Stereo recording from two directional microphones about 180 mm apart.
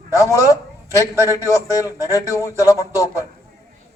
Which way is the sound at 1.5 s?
20° left (ahead or behind).